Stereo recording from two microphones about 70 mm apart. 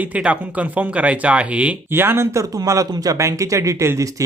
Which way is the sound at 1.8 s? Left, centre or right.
Right.